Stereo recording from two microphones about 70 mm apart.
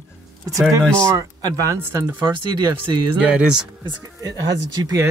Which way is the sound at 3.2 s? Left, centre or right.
Centre.